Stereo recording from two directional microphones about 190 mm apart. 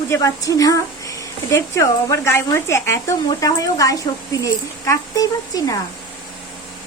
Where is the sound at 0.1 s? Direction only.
15° left (ahead or behind).